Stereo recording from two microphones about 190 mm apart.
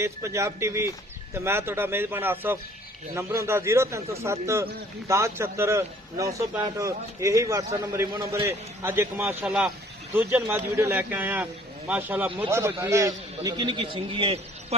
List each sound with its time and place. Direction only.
0.0 s a man's voice: 15° right (ahead or behind); by 14.8 s 30° right (ahead or behind)